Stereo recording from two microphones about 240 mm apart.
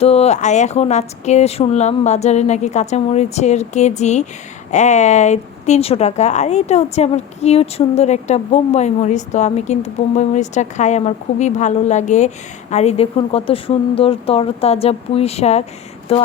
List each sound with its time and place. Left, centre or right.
0.0 s speech: left